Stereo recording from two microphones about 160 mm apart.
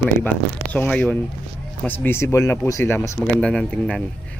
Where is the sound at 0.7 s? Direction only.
5° left (ahead or behind).